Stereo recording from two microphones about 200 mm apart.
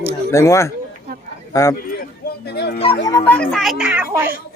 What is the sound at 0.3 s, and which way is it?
Speech, 15° left (ahead or behind).